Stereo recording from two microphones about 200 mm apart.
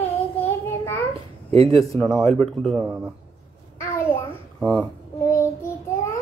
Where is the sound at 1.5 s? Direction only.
30° right (ahead or behind).